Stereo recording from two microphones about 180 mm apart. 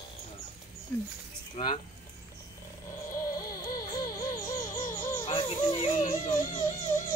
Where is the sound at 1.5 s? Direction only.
35° left (ahead or behind).